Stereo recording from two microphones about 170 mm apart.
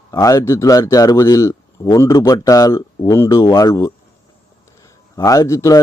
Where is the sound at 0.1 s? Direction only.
20° left (ahead or behind).